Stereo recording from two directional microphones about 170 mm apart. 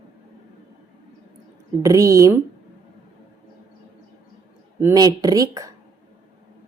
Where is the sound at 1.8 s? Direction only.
20° right (ahead or behind).